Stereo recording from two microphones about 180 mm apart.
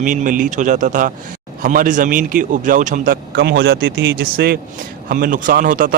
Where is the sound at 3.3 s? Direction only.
70° right (ahead or behind).